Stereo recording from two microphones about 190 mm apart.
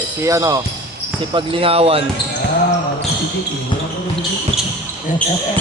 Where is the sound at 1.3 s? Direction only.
25° right (ahead or behind).